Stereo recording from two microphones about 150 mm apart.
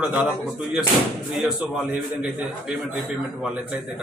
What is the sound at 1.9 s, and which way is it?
A man's voice, 10° right (ahead or behind).